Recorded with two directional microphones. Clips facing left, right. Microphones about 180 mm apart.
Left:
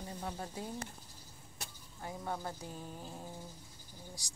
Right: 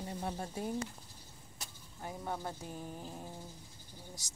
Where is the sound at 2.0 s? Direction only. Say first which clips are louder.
Even; 15° right (ahead or behind).